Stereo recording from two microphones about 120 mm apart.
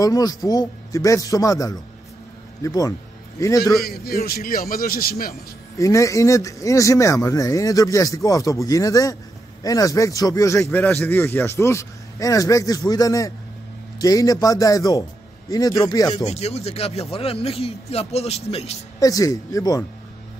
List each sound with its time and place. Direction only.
0.0 s speech: 30° left (ahead or behind)
5.8 s speech: 25° left (ahead or behind)
16.3 s speech: 60° left (ahead or behind)
18.9 s speech: 30° left (ahead or behind)